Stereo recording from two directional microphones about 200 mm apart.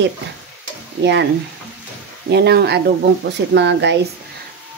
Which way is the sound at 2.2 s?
55° right (ahead or behind).